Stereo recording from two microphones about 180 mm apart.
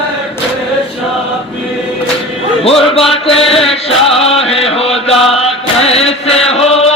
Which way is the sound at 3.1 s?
30° left (ahead or behind).